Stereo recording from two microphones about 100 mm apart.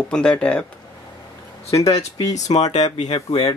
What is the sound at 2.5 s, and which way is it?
Speech, 60° left (ahead or behind).